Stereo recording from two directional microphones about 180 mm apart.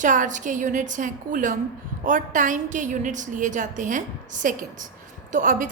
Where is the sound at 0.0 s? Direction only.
45° right (ahead or behind).